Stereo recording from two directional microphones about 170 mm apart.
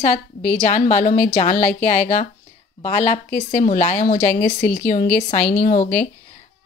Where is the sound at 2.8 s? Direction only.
45° left (ahead or behind).